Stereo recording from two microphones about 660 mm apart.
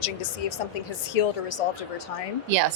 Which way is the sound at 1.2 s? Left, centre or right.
Left.